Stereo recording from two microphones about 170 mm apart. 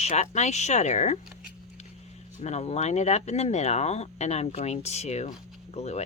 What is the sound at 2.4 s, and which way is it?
Speech, 40° left (ahead or behind).